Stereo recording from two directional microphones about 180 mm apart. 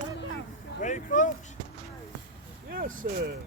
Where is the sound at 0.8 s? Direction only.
45° left (ahead or behind).